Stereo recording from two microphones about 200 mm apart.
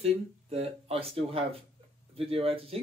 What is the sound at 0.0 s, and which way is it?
Speech, 30° right (ahead or behind).